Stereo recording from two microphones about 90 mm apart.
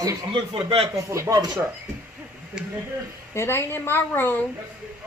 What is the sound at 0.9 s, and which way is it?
Speech, 35° right (ahead or behind).